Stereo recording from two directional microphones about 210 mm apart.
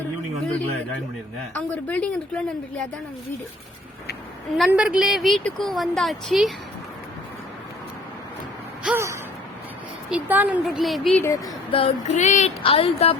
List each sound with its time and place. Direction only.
1.5 s a woman's voice: 5° left (ahead or behind)
4.5 s a woman's voice: centre (ahead or behind)
8.8 s gasp: 10° right (ahead or behind)
10.1 s a woman's voice: 5° right (ahead or behind)
11.2 s speech: 10° left (ahead or behind)
11.7 s a sound: 30° left (ahead or behind)